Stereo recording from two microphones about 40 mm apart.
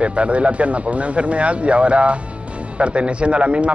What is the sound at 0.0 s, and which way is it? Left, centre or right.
Speech, right.